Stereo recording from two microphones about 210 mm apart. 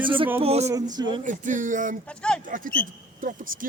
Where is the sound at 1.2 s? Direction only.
35° right (ahead or behind).